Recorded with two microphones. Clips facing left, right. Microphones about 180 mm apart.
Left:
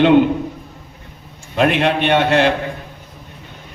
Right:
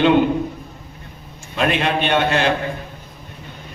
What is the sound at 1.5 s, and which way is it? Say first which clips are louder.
Speech: left 4 dB; 65° left (ahead or behind).